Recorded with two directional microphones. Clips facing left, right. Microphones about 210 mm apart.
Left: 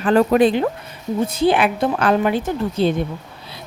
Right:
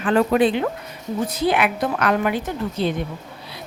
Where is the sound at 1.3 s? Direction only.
30° left (ahead or behind).